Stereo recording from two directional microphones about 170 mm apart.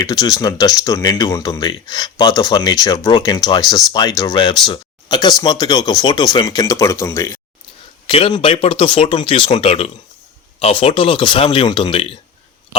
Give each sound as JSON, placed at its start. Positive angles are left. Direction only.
{"t": 0.0, "sound": "speech", "side_deg": 20}
{"t": 8.0, "sound": "speech", "side_deg": 30}